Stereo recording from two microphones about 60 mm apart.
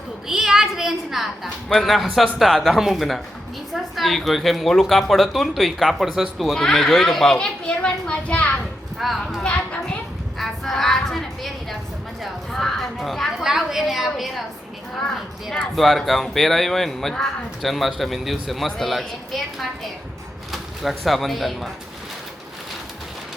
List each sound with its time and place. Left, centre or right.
0.3 s a woman's voice: centre
6.6 s a child's voice: centre
9.0 s speech: centre
15.4 s speech: centre